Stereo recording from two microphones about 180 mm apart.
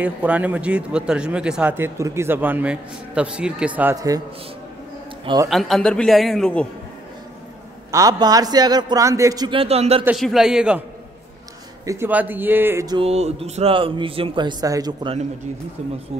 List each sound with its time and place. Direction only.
0.0 s a man's voice: 10° right (ahead or behind)
5.2 s a man's voice: 25° right (ahead or behind)
5.5 s a man's voice: centre (ahead or behind)
7.9 s a man's voice: 20° right (ahead or behind); by 10.0 s 35° right (ahead or behind)
10.0 s a man's voice: centre (ahead or behind)
11.8 s a man's voice: 15° right (ahead or behind)
13.0 s a man's voice: 35° right (ahead or behind)